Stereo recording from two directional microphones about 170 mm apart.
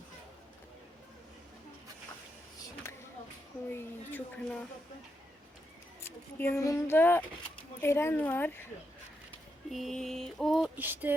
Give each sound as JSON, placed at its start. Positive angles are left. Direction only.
{"t": 3.7, "sound": "speech", "side_deg": 10}
{"t": 6.0, "sound": "speech", "side_deg": 15}
{"t": 9.6, "sound": "mantra", "side_deg": 0}
{"t": 10.8, "sound": "a sound", "side_deg": -10}